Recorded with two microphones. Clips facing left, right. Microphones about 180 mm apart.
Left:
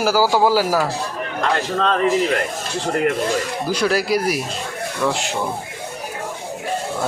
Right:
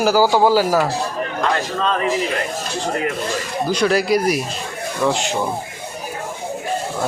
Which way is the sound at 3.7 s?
5° left (ahead or behind).